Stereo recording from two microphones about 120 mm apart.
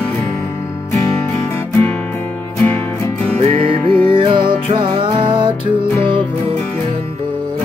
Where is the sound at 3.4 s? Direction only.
45° right (ahead or behind).